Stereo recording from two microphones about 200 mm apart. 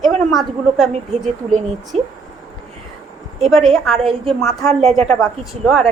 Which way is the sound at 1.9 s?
30° right (ahead or behind).